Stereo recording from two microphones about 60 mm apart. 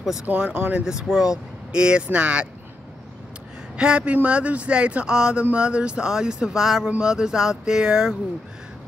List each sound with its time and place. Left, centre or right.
0.0 s speech: centre
0.3 s speech: right
0.8 s speech: centre
3.7 s speech: centre